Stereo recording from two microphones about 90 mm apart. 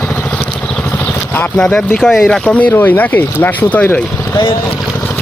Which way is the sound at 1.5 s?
10° left (ahead or behind).